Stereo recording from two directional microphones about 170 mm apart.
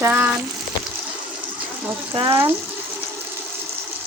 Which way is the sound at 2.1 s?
25° right (ahead or behind).